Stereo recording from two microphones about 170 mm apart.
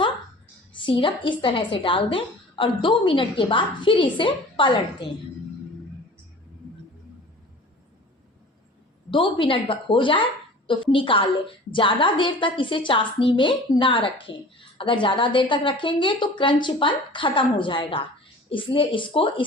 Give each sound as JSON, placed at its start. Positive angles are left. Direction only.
{"t": 0.8, "sound": "a woman's voice", "side_deg": 30}
{"t": 9.0, "sound": "a woman's voice", "side_deg": 30}